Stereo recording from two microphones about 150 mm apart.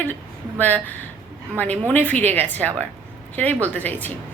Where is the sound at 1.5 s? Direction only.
10° left (ahead or behind).